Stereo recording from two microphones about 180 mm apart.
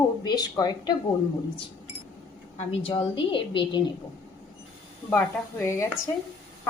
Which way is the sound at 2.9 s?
30° left (ahead or behind).